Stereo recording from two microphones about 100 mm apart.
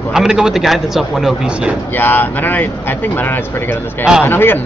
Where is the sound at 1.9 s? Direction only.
20° left (ahead or behind).